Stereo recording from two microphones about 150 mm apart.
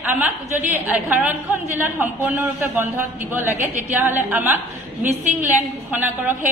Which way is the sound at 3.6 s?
15° right (ahead or behind).